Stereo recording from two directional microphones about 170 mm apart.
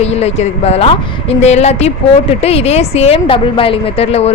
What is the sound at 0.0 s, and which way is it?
Speech, 40° left (ahead or behind).